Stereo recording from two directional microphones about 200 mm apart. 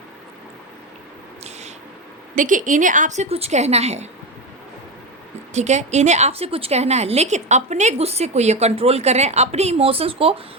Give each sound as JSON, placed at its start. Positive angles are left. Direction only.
{"t": 2.3, "sound": "a woman's voice", "side_deg": -40}
{"t": 5.5, "sound": "a woman's voice", "side_deg": -35}